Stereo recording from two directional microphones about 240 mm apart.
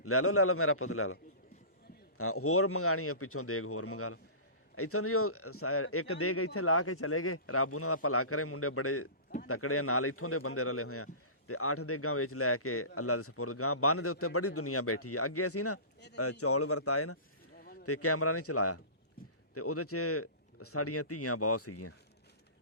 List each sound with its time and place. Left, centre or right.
0.0 s a man's voice: left